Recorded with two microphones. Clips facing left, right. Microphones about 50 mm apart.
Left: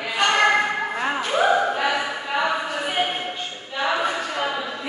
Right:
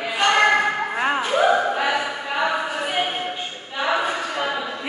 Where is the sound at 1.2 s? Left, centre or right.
Centre.